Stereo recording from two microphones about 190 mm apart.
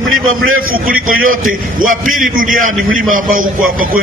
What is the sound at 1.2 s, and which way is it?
A man's voice, 45° right (ahead or behind).